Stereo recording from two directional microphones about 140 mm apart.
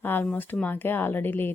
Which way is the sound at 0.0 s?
15° left (ahead or behind).